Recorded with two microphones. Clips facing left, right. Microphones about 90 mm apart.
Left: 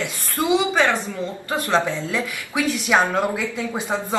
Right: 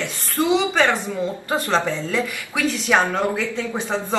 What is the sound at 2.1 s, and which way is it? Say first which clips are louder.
Speech: right 1 dB; 10° left (ahead or behind).